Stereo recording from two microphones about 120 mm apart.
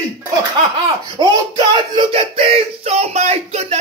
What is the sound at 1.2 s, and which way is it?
A man's voice, 40° right (ahead or behind).